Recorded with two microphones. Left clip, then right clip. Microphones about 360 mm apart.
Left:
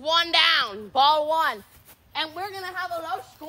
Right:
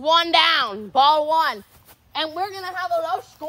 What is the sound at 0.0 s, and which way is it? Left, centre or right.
A woman's voice, centre.